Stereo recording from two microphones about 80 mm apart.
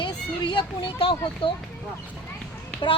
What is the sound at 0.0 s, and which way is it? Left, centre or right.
Speech, left.